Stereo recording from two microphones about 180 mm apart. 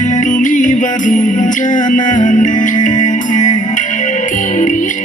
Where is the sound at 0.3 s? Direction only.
45° left (ahead or behind).